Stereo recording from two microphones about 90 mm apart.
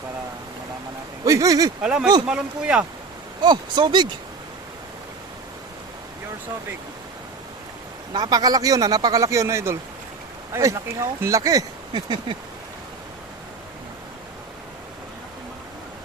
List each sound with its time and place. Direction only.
1.2 s speech: 40° right (ahead or behind)
1.8 s speech: 10° right (ahead or behind)
3.4 s speech: 55° right (ahead or behind)
8.1 s speech: 50° right (ahead or behind)
11.9 s a sound: 70° right (ahead or behind)